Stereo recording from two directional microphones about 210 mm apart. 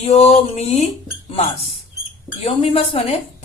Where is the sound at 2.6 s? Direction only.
25° left (ahead or behind).